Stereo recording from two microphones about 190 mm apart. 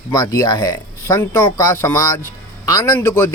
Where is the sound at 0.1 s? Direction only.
20° left (ahead or behind).